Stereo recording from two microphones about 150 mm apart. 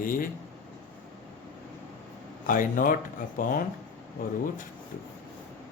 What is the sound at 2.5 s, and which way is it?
Speech, 65° left (ahead or behind).